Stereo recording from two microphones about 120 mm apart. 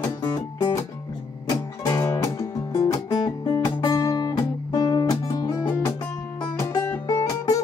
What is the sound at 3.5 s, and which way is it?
Music, 30° left (ahead or behind).